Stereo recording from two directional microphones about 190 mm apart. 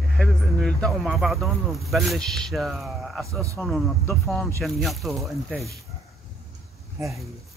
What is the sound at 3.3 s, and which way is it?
Speech, 15° right (ahead or behind).